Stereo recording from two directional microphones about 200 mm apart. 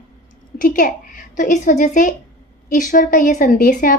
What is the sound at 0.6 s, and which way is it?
A woman's voice, 45° left (ahead or behind).